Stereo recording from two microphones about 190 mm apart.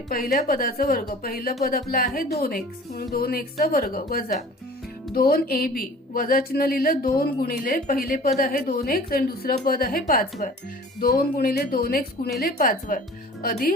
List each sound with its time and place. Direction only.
0.1 s a woman's voice: 50° left (ahead or behind)